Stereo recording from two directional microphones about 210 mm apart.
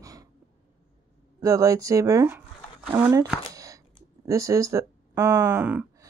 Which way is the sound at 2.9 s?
15° right (ahead or behind).